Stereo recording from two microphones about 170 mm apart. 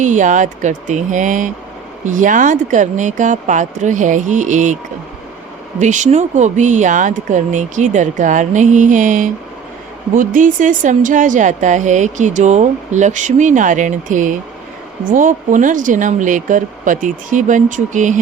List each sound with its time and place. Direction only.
0.0 s speech: 45° right (ahead or behind)
5.8 s speech: 45° right (ahead or behind)